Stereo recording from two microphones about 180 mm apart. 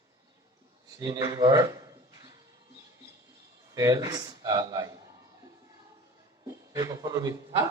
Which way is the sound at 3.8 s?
15° right (ahead or behind).